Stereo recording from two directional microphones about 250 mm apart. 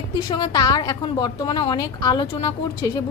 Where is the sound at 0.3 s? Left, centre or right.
Centre.